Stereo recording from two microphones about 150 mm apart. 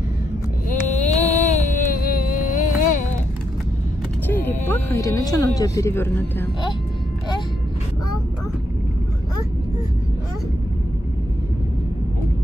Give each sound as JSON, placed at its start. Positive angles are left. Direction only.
{"t": 0.7, "sound": "a sound", "side_deg": 50}
{"t": 1.9, "sound": "music", "side_deg": 70}
{"t": 4.3, "sound": "music", "side_deg": 15}